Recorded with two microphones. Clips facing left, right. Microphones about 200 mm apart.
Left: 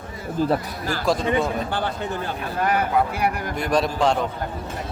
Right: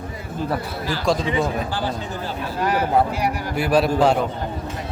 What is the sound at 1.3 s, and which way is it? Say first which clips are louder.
Speech: even; 60° left (ahead or behind).